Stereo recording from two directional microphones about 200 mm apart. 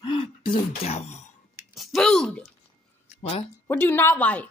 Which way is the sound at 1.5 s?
Centre (ahead or behind).